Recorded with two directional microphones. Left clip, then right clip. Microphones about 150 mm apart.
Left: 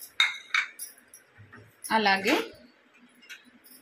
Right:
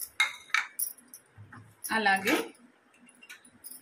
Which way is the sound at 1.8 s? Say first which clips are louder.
Left 2 dB; 35° left (ahead or behind).